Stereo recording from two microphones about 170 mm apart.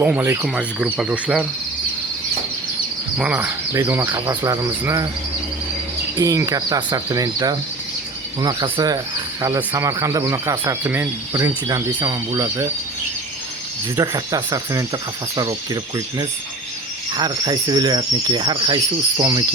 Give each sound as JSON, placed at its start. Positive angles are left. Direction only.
{"t": 0.0, "sound": "speech", "side_deg": -10}
{"t": 3.2, "sound": "speech", "side_deg": -10}
{"t": 6.1, "sound": "speech", "side_deg": -20}
{"t": 13.9, "sound": "speech", "side_deg": -25}